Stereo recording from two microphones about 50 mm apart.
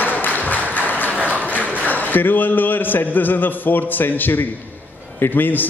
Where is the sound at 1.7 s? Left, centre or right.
Left.